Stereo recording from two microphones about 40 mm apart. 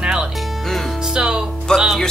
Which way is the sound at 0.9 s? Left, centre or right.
Centre.